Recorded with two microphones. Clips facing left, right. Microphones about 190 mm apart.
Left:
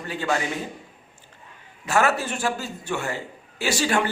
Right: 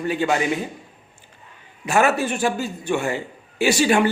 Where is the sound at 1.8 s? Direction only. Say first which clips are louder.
Right 3 dB; 15° right (ahead or behind).